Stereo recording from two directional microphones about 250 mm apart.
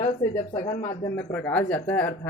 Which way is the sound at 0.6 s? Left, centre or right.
Left.